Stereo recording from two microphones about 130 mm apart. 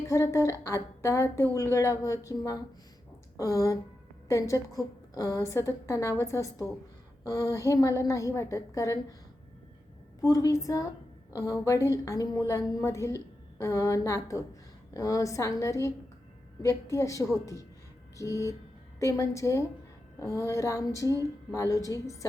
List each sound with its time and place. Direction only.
0.1 s a woman's voice: 20° left (ahead or behind)
10.2 s a woman's voice: 25° left (ahead or behind)